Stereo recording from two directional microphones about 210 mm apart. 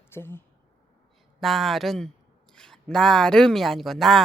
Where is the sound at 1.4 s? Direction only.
Centre (ahead or behind).